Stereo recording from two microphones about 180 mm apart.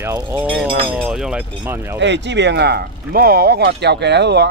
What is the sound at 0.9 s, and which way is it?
Speech, centre (ahead or behind).